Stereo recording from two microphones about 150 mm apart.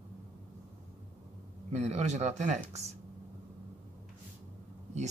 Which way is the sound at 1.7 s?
50° right (ahead or behind).